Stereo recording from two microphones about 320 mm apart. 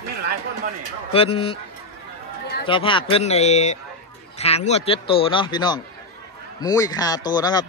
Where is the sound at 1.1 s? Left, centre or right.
Centre.